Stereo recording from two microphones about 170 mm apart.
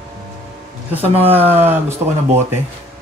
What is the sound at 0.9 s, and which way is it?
Speech, 35° right (ahead or behind).